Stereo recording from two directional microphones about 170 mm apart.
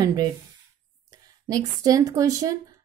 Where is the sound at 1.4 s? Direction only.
20° right (ahead or behind).